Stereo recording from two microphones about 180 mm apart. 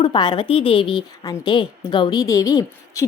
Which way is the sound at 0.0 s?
25° left (ahead or behind).